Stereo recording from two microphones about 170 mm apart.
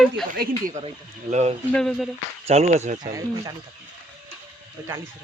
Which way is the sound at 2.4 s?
40° right (ahead or behind).